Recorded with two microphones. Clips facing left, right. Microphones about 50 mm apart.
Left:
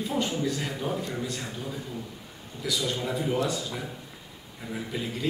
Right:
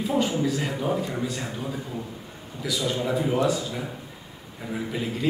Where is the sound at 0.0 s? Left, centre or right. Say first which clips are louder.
Right 4 dB; centre.